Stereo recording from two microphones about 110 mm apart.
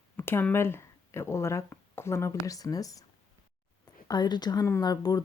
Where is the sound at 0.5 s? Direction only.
20° left (ahead or behind).